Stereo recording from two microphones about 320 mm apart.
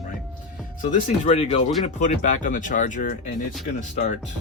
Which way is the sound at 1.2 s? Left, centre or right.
Centre.